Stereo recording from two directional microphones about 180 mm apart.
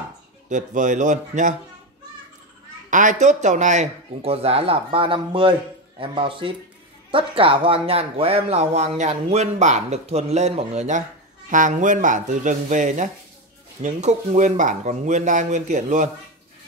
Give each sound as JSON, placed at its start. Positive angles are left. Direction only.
{"t": 0.5, "sound": "speech", "side_deg": -45}
{"t": 2.9, "sound": "speech", "side_deg": -45}